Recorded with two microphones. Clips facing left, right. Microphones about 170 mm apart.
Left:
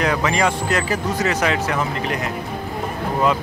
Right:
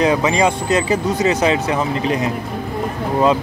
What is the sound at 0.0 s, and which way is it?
Speech, 20° right (ahead or behind).